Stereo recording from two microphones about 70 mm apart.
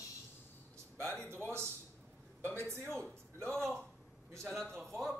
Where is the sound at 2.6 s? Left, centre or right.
Right.